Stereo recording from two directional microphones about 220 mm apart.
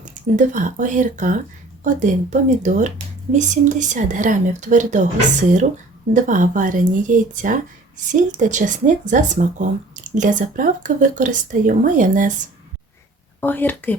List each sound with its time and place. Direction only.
0.0 s speech: 35° right (ahead or behind)
13.4 s speech: 10° left (ahead or behind)